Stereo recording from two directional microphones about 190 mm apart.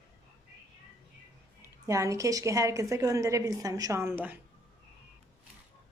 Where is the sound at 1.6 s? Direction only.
15° right (ahead or behind).